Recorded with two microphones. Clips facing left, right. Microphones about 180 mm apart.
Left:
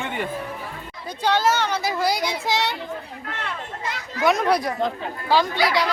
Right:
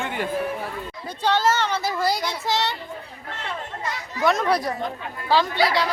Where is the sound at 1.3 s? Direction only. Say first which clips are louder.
Even; 10° left (ahead or behind).